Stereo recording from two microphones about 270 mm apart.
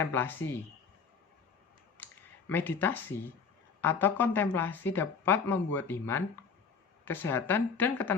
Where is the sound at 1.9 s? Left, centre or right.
Centre.